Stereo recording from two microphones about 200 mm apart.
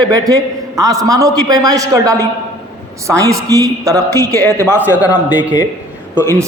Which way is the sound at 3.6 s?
15° right (ahead or behind).